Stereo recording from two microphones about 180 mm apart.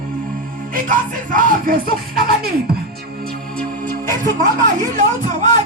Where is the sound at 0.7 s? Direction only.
50° right (ahead or behind).